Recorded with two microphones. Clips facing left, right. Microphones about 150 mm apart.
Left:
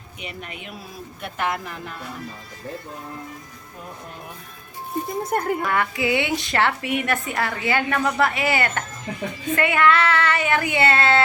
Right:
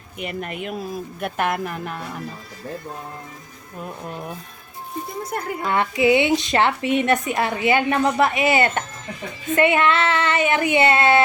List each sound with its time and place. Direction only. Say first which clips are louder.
0.2 s a woman's voice: right 8 dB; 50° right (ahead or behind)
5.2 s speech: left 5 dB; 50° left (ahead or behind)
5.6 s a woman's voice: right 4 dB; 25° right (ahead or behind)